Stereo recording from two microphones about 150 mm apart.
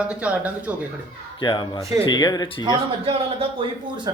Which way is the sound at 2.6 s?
35° right (ahead or behind).